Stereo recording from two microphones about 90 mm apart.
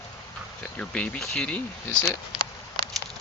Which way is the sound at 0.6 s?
15° left (ahead or behind).